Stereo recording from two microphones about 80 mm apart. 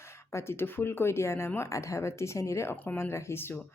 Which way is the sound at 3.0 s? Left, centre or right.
Left.